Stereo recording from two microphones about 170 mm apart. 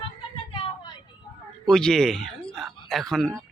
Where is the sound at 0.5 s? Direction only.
30° left (ahead or behind).